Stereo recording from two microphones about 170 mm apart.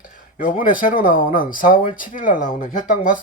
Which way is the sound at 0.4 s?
55° left (ahead or behind).